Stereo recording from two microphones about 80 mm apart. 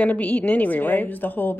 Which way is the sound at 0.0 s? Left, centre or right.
Left.